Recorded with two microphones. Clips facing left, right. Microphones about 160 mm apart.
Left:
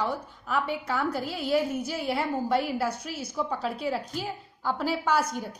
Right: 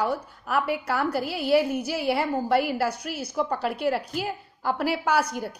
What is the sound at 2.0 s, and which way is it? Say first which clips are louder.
Speech: right 3 dB; 5° right (ahead or behind).